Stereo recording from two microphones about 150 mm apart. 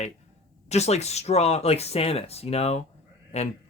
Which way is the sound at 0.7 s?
45° left (ahead or behind).